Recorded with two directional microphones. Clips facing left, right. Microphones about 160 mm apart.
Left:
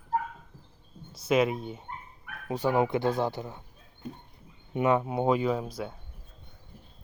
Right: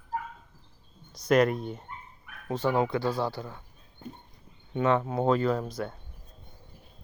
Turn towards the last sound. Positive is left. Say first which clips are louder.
# right 1 dB
turn(degrees=5)  # may be behind; listen again after turning